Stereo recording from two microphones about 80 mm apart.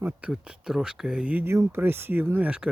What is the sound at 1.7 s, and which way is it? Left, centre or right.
Speech, right.